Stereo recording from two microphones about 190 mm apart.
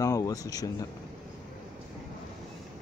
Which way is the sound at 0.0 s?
20° left (ahead or behind).